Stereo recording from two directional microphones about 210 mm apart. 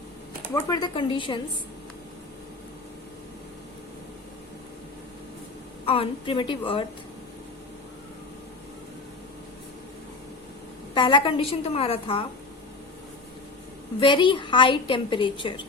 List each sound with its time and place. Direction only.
0.5 s a woman's voice: 20° left (ahead or behind)
5.8 s a woman's voice: 25° left (ahead or behind)
10.9 s a woman's voice: 25° left (ahead or behind)
14.0 s a woman's voice: 25° left (ahead or behind)